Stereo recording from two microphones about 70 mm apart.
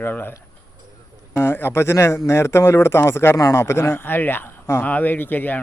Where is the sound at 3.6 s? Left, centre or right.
Left.